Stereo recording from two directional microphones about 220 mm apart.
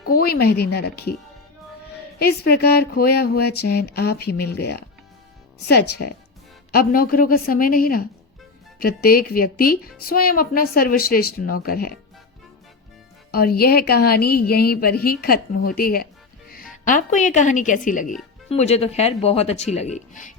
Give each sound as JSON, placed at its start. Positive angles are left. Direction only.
{"t": 0.1, "sound": "a woman's voice", "side_deg": 45}
{"t": 2.1, "sound": "a woman's voice", "side_deg": 45}
{"t": 6.7, "sound": "a woman's voice", "side_deg": 40}
{"t": 13.3, "sound": "a woman's voice", "side_deg": 45}